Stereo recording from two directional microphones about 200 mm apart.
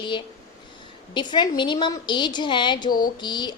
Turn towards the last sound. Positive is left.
turn(degrees=20)  # may be behind; listen again after turning